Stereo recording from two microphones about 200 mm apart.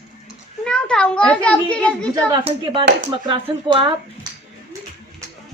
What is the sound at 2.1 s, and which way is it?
A man's voice, 25° right (ahead or behind).